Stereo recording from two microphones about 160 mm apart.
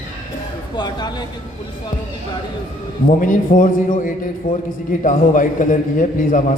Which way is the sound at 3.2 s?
55° left (ahead or behind).